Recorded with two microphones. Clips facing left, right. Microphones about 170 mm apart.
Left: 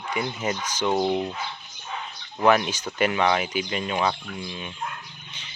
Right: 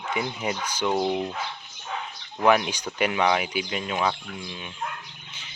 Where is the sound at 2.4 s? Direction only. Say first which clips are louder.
Left 1 dB; 10° right (ahead or behind).